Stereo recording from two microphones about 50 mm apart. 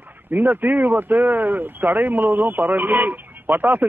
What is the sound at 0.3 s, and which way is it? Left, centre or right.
Speech, right.